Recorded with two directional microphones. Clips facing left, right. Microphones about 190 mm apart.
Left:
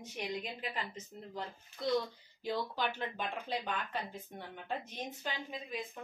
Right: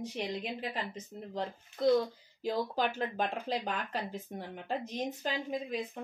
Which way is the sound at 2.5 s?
40° right (ahead or behind).